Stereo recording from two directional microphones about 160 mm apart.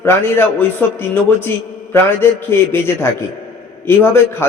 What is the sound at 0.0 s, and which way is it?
A man's voice, 15° left (ahead or behind).